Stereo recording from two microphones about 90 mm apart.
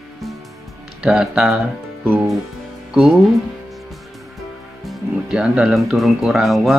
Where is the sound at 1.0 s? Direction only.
5° right (ahead or behind).